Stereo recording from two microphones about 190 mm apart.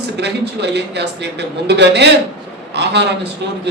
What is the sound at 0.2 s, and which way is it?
A man's voice, 60° right (ahead or behind).